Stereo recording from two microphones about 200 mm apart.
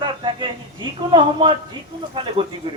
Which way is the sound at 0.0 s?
25° right (ahead or behind).